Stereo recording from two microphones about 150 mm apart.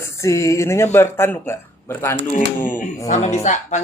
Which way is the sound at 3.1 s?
50° left (ahead or behind).